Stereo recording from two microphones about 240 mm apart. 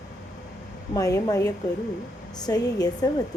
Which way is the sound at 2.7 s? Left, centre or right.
Centre.